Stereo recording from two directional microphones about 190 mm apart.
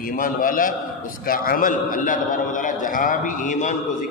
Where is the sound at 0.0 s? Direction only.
45° left (ahead or behind).